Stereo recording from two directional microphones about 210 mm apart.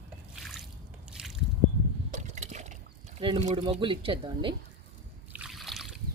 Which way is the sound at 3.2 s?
25° right (ahead or behind).